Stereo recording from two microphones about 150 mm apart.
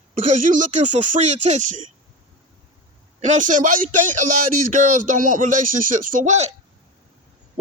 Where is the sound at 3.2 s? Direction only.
55° right (ahead or behind).